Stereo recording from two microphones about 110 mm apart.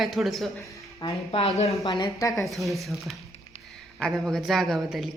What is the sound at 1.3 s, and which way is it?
Speech, 65° left (ahead or behind).